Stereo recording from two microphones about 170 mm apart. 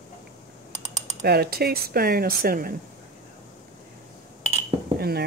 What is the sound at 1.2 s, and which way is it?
Speech, 70° right (ahead or behind).